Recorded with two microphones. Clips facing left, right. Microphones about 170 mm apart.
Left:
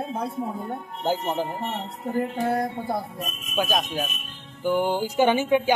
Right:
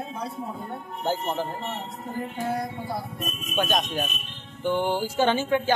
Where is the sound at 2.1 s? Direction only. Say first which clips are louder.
Left 5 dB; 60° left (ahead or behind).